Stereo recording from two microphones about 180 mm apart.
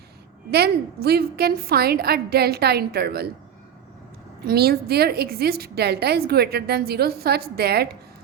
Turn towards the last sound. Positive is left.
turn(degrees=-60)  # may be behind; listen again after turning